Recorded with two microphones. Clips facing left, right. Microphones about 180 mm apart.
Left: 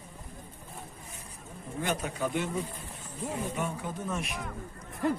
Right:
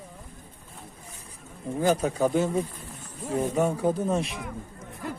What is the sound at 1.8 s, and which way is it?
Speech, 35° right (ahead or behind).